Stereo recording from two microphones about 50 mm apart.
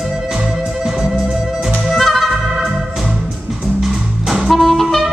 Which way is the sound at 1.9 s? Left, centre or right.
Centre.